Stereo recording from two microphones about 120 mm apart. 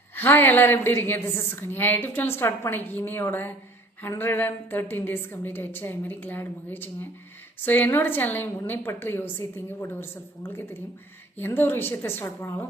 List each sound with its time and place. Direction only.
0.2 s a woman's voice: 20° left (ahead or behind)